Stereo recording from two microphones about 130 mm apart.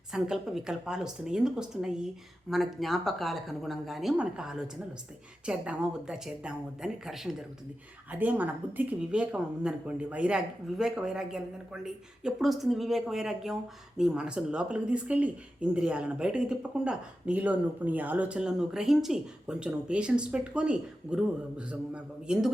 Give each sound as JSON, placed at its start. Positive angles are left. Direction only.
{"t": 0.1, "sound": "speech", "side_deg": -5}